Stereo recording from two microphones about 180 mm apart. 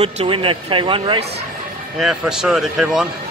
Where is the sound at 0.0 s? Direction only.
30° right (ahead or behind).